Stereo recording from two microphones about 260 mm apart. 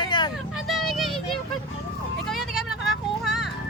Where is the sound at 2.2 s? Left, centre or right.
Centre.